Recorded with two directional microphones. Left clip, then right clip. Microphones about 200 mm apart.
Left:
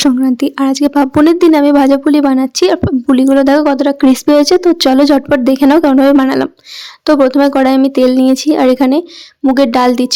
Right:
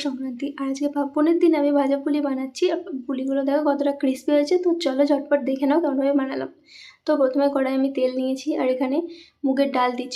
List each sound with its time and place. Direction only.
0.0 s speech: 55° left (ahead or behind)